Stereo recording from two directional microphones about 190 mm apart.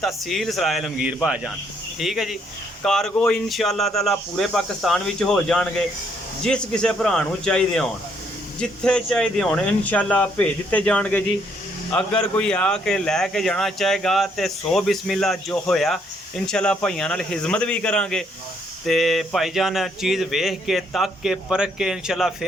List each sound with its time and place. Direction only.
0.0 s speech: centre (ahead or behind)